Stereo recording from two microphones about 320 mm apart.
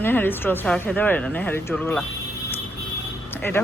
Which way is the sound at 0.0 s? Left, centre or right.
Centre.